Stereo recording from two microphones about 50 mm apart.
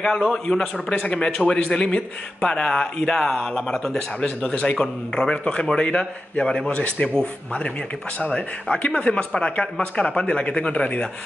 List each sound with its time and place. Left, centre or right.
0.0 s speech: centre